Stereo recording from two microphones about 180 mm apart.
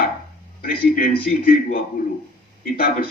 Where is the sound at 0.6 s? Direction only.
50° left (ahead or behind).